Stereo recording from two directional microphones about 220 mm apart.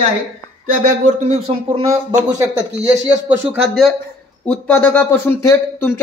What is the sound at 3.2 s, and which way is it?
Speech, centre (ahead or behind).